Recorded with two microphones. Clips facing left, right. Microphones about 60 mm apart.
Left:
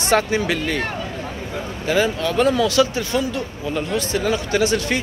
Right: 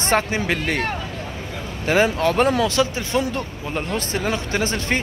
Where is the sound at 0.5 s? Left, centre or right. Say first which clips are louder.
Even; right.